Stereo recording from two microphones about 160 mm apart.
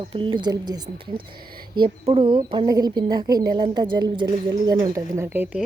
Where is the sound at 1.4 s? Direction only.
70° right (ahead or behind).